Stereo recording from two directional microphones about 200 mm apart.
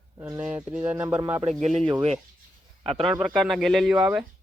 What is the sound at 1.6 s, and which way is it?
Speech, 35° right (ahead or behind).